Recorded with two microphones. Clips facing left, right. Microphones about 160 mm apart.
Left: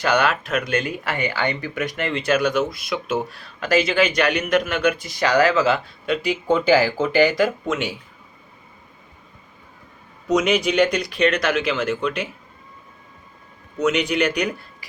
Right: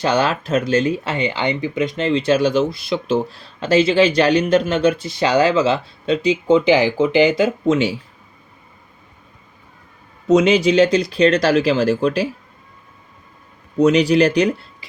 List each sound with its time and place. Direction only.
0.0 s speech: 30° right (ahead or behind)
10.2 s speech: 30° right (ahead or behind)
13.7 s speech: 35° right (ahead or behind)